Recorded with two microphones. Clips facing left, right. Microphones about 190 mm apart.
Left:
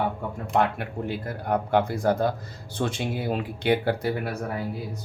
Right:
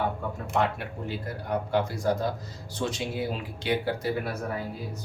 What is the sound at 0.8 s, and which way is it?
Speech, 55° left (ahead or behind).